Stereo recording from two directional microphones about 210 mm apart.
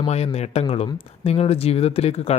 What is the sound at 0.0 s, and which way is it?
Speech, 30° left (ahead or behind).